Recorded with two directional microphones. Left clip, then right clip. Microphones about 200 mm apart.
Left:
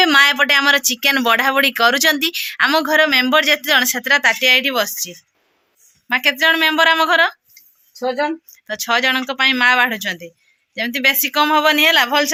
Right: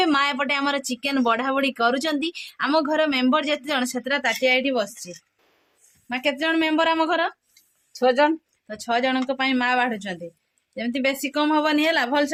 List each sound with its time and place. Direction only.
0.0 s speech: centre (ahead or behind)
7.9 s speech: 25° right (ahead or behind)
8.6 s speech: 5° left (ahead or behind)